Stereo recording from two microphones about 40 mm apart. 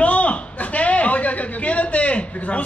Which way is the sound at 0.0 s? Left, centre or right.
Left.